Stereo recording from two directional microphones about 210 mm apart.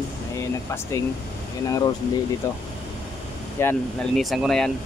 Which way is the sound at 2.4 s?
15° left (ahead or behind).